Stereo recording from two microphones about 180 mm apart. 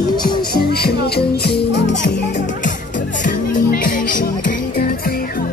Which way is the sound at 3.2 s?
45° left (ahead or behind).